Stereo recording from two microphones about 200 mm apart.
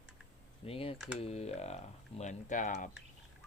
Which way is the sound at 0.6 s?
30° left (ahead or behind).